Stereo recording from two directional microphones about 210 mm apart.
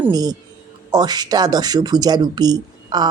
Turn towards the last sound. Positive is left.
turn(degrees=-20)  # may be behind; listen again after turning